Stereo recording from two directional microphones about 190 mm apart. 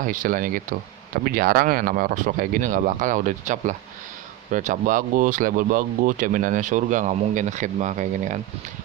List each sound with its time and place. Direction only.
0.0 s speech: 45° right (ahead or behind)